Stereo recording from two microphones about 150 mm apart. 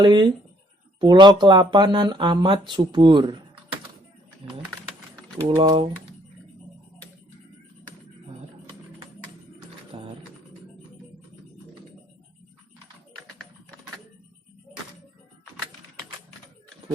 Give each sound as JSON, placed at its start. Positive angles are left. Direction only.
{"t": 0.0, "sound": "speech", "side_deg": -30}
{"t": 5.5, "sound": "speech", "side_deg": -30}
{"t": 9.9, "sound": "music", "side_deg": -40}